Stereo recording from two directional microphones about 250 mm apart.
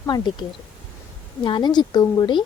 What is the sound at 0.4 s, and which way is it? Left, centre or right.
A woman's voice, centre.